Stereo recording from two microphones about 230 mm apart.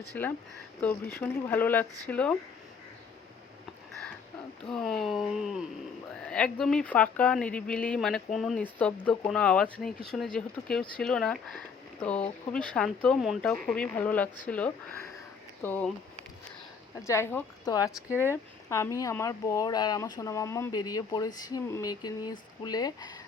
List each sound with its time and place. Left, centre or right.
0.1 s speech: centre
4.7 s speech: centre
17.0 s speech: centre